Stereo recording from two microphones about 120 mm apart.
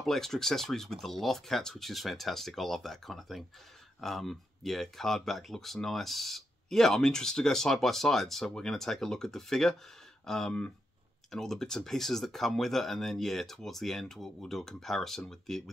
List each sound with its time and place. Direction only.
0.0 s speech: 5° left (ahead or behind)